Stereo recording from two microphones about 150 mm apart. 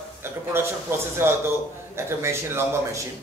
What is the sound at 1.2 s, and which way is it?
A man's voice, 15° right (ahead or behind).